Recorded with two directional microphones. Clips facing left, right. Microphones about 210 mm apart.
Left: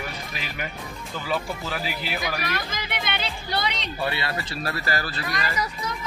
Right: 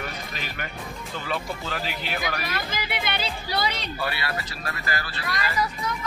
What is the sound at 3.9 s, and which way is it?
Speech, 25° left (ahead or behind).